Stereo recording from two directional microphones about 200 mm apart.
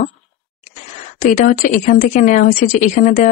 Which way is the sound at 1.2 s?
45° left (ahead or behind).